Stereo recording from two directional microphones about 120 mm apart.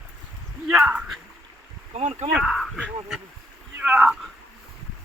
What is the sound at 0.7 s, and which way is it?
Speech, 10° right (ahead or behind).